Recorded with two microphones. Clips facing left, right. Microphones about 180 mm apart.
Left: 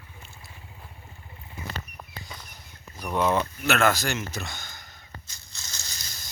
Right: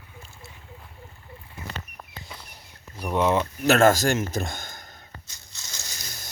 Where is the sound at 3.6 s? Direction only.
40° right (ahead or behind).